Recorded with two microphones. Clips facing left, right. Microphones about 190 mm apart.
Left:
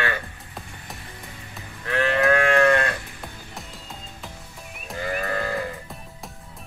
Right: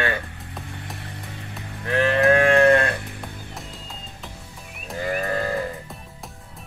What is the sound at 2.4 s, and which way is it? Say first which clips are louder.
Livestock: right 4 dB; 35° right (ahead or behind).